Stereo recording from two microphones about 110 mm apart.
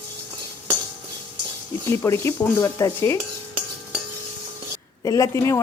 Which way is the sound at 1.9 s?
25° left (ahead or behind).